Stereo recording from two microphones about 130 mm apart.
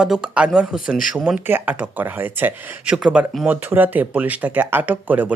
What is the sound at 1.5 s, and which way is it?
Speech, 15° right (ahead or behind).